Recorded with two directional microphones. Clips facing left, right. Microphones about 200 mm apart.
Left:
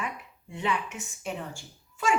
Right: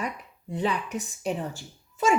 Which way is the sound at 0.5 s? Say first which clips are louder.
Right 3 dB; 35° right (ahead or behind).